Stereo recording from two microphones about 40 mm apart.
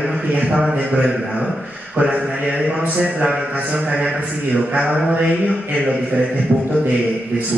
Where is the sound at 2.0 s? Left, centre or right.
Right.